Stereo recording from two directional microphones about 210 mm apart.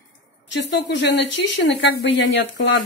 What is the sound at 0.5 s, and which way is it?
Speech, 55° left (ahead or behind).